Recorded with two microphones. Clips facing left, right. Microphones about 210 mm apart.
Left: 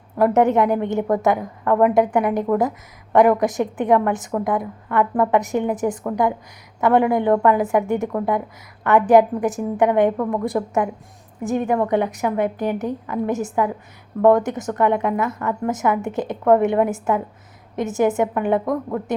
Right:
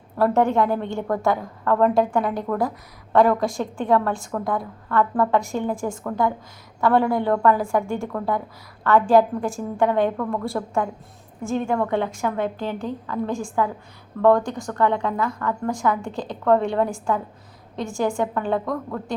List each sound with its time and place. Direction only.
0.2 s a woman's voice: 20° left (ahead or behind)